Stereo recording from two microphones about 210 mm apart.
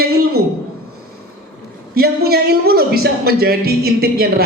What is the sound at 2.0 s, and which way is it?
A man's voice, 45° right (ahead or behind).